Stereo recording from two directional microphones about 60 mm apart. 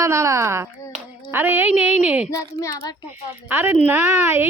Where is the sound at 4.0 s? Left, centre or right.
Right.